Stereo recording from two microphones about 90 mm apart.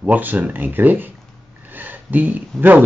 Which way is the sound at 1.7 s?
20° right (ahead or behind).